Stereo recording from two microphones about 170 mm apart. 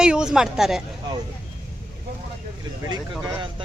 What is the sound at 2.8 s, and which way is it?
Speech, 25° right (ahead or behind).